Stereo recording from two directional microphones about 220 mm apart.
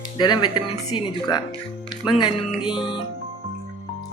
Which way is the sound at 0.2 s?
20° left (ahead or behind).